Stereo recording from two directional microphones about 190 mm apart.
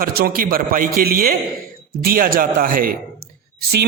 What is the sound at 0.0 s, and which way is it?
A man's voice, 50° right (ahead or behind).